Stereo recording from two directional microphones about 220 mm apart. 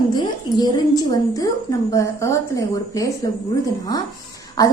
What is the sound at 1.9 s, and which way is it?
A woman's voice, 15° left (ahead or behind).